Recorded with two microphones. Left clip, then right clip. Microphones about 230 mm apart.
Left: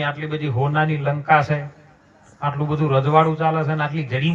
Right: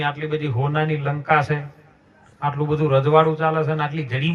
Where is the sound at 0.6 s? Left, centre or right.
Left.